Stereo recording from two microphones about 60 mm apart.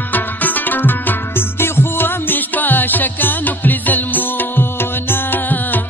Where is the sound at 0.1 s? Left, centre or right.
Left.